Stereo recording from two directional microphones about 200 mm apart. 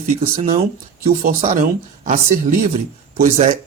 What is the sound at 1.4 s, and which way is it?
Speech, 35° right (ahead or behind).